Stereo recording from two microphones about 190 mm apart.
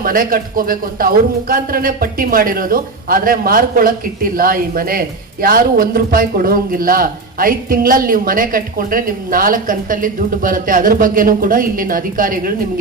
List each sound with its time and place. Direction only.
0.0 s a man's voice: 45° right (ahead or behind)